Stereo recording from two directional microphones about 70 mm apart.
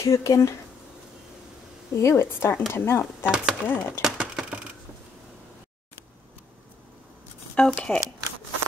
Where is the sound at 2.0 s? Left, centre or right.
Left.